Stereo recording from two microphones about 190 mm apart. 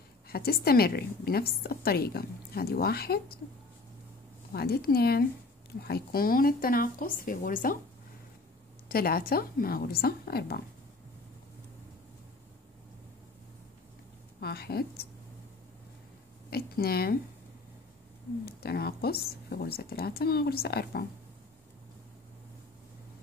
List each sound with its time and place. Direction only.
0.3 s a woman's voice: 55° left (ahead or behind)
4.5 s a woman's voice: 55° left (ahead or behind)
8.8 s speech: 50° left (ahead or behind)
14.4 s a woman's voice: 55° left (ahead or behind)
16.4 s speech: 55° left (ahead or behind)
18.4 s a woman's voice: 55° left (ahead or behind)